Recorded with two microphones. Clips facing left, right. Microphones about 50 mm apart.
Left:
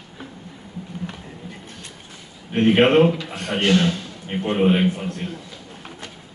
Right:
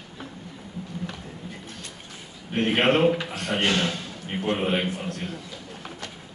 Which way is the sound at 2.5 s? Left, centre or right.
Centre.